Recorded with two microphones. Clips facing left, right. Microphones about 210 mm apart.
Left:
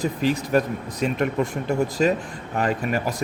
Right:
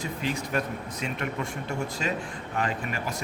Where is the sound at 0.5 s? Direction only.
40° left (ahead or behind).